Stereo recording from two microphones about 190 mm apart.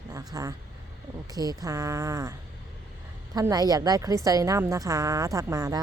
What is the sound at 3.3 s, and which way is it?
A woman's voice, 20° right (ahead or behind).